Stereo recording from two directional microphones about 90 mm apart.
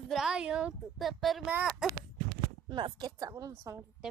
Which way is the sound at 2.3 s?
45° right (ahead or behind).